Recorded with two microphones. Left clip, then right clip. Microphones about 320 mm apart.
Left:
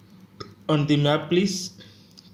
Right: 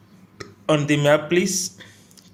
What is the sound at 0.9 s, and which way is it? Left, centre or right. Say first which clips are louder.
Speech: right 5 dB; right.